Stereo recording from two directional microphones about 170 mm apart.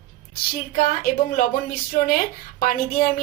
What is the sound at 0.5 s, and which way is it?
A woman's voice, 60° left (ahead or behind).